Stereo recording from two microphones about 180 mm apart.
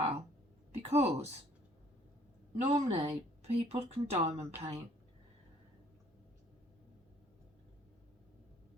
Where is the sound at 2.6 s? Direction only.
35° right (ahead or behind).